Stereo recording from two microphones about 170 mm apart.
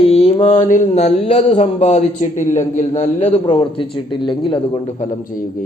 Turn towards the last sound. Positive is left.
turn(degrees=55)  # may be behind; listen again after turning